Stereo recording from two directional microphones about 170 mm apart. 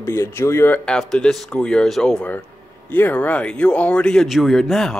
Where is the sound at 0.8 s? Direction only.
5° left (ahead or behind).